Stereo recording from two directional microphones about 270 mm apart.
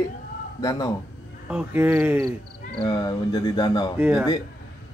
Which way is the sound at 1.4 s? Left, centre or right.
Centre.